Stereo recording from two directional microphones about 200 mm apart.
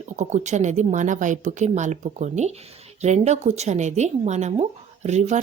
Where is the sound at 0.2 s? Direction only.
35° right (ahead or behind).